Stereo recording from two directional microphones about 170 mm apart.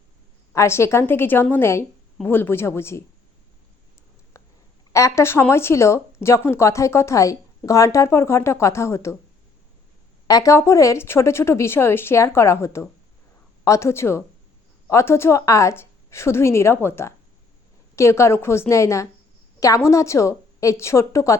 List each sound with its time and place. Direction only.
0.5 s speech: 15° left (ahead or behind)
4.4 s a sound: 15° left (ahead or behind)
4.9 s speech: 20° left (ahead or behind)
10.2 s speech: 20° left (ahead or behind)